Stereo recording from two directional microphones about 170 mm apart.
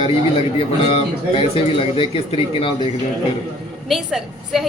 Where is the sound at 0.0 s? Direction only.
35° left (ahead or behind).